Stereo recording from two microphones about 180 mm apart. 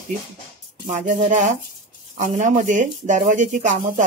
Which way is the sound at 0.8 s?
45° right (ahead or behind).